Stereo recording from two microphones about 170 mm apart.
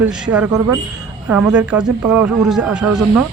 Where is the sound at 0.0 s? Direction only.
10° right (ahead or behind).